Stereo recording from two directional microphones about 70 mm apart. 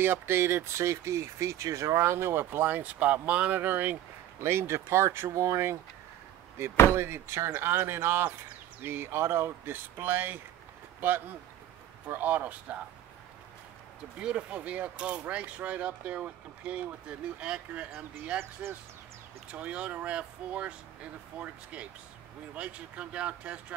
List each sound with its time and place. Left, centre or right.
0.0 s speech: right
4.4 s speech: right
6.9 s speech: right
14.2 s speech: centre
18.4 s speech: right
19.5 s speech: centre
22.6 s speech: centre